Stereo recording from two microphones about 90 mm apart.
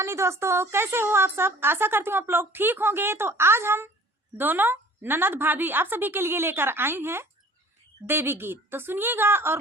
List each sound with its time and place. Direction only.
0.0 s a woman's voice: 30° right (ahead or behind)